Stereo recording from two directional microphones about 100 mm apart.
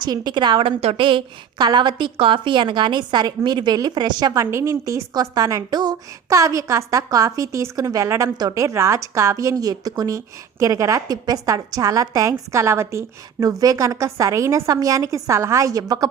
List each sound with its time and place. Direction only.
0.0 s a woman's voice: 45° right (ahead or behind)
0.8 s a woman's voice: 70° right (ahead or behind); by 16.0 s 35° right (ahead or behind)